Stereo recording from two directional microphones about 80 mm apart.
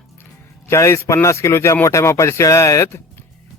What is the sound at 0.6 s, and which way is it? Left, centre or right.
A man's voice, left.